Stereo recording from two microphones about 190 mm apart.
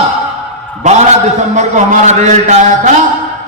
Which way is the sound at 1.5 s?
40° right (ahead or behind).